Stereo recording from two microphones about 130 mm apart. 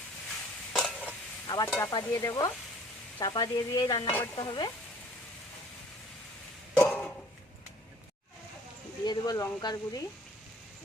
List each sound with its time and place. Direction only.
0.7 s stir: 5° left (ahead or behind)
1.5 s stir: 30° left (ahead or behind)
1.8 s speech: 30° left (ahead or behind)
6.7 s a sound: 10° left (ahead or behind)
9.0 s speech: 30° left (ahead or behind)